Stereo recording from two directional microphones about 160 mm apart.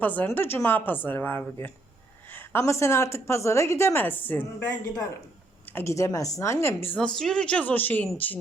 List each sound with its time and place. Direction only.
0.0 s a woman's voice: 10° left (ahead or behind)
5.7 s a woman's voice: 20° left (ahead or behind)